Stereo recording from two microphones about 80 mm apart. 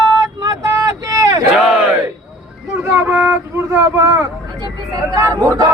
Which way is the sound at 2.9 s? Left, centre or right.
Right.